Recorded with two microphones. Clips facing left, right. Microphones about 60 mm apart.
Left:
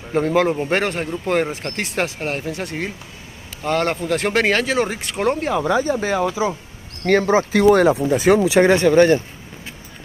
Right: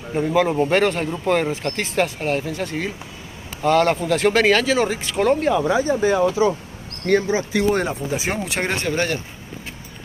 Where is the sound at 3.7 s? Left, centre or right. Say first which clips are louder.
Right 3 dB; left.